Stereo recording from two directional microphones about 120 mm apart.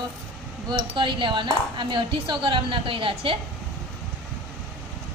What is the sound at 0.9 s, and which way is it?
Speech, 45° right (ahead or behind).